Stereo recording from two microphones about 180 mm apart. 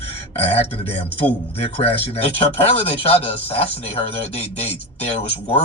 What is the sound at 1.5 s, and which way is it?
Speech, 35° left (ahead or behind).